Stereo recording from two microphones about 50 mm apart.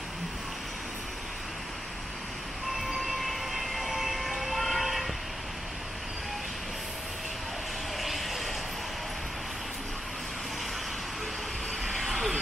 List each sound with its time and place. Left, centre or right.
2.8 s vehicle: centre
8.0 s vehicle: centre
11.8 s vehicle: centre